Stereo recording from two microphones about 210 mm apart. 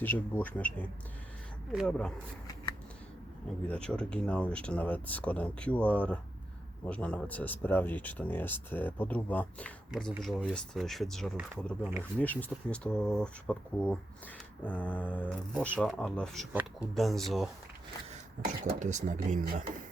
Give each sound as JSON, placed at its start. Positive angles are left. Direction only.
{"t": 0.0, "sound": "speech", "side_deg": 10}
{"t": 3.7, "sound": "speech", "side_deg": 5}
{"t": 11.8, "sound": "speech", "side_deg": -10}
{"t": 12.2, "sound": "speech", "side_deg": 10}
{"t": 18.6, "sound": "speech", "side_deg": -35}